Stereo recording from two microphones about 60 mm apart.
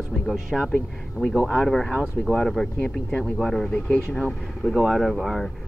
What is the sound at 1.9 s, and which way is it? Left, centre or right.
Speech, right.